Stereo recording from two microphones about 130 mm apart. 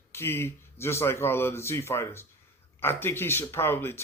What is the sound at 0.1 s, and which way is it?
Speech, 20° left (ahead or behind).